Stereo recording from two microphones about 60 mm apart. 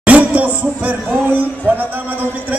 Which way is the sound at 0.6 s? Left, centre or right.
Right.